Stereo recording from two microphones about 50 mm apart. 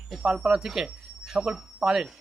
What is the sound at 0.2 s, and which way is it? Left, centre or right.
Speech, centre.